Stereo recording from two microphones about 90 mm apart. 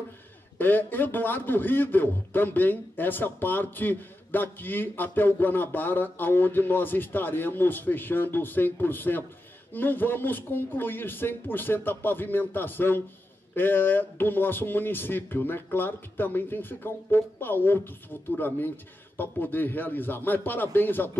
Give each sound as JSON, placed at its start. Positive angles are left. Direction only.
{"t": 0.6, "sound": "a man's voice", "side_deg": 20}